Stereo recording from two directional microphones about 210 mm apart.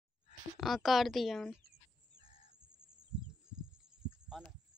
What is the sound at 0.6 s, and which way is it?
Speech, centre (ahead or behind).